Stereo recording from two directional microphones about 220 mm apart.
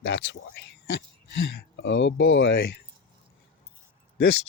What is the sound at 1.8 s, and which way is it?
Speech, 55° left (ahead or behind).